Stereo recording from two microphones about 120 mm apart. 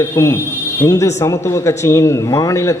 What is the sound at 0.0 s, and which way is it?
A man's voice, 25° left (ahead or behind).